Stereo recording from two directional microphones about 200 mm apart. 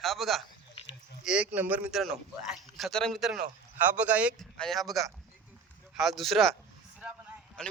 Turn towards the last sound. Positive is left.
turn(degrees=0)  # may be behind; listen again after turning